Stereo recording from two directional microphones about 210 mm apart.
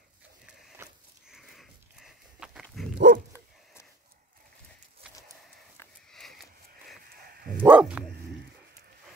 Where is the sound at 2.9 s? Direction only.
55° right (ahead or behind).